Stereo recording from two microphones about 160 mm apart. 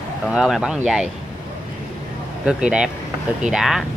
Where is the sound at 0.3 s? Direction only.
5° right (ahead or behind).